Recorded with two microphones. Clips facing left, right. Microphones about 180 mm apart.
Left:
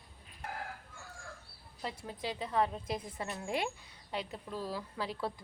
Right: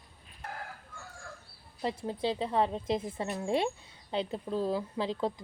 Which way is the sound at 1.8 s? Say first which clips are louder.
Right 8 dB; 30° right (ahead or behind).